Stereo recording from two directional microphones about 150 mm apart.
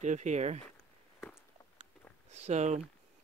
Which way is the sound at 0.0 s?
50° right (ahead or behind).